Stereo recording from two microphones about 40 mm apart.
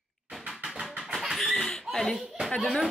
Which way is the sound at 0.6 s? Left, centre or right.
Centre.